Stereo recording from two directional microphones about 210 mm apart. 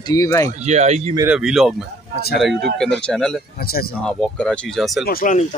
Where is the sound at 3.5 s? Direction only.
45° left (ahead or behind).